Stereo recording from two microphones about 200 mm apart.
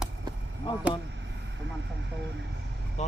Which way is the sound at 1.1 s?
60° right (ahead or behind).